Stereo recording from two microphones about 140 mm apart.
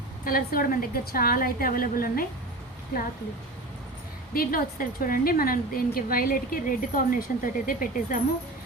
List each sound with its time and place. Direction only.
0.3 s a woman's voice: 90° left
4.4 s a woman's voice: 90° left